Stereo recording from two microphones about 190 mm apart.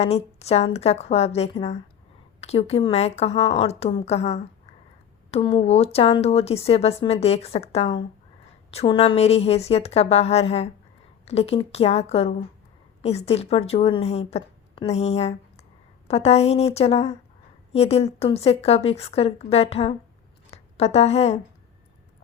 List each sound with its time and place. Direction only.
0.0 s a woman's voice: 35° left (ahead or behind)